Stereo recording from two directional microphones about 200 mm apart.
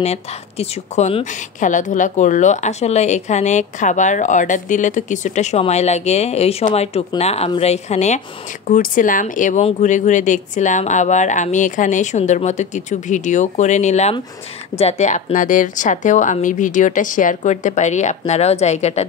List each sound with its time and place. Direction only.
0.0 s speech: 30° left (ahead or behind)